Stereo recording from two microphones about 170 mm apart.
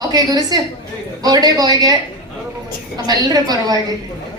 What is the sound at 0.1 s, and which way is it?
A woman's voice, 25° right (ahead or behind).